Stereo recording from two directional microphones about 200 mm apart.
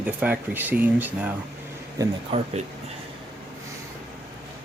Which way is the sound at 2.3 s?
30° right (ahead or behind).